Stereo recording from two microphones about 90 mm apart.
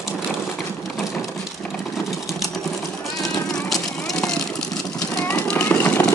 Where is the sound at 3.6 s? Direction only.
5° left (ahead or behind).